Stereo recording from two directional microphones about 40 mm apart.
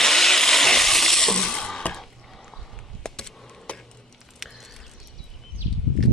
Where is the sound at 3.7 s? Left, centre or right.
Left.